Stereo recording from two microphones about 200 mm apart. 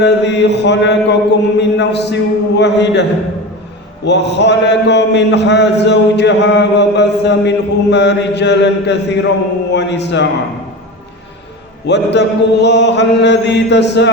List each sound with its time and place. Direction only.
0.0 s a man's voice: 60° left (ahead or behind)
11.9 s a man's voice: 60° left (ahead or behind)